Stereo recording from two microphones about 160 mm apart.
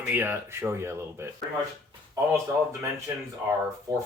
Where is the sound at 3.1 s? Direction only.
15° right (ahead or behind).